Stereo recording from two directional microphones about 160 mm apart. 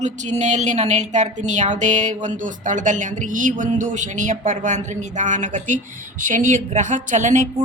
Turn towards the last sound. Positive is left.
turn(degrees=-50)  # may be behind; listen again after turning